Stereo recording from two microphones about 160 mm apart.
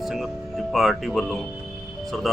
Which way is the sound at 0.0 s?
Centre (ahead or behind).